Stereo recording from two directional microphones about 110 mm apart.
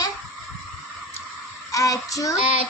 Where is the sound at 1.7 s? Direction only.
30° left (ahead or behind).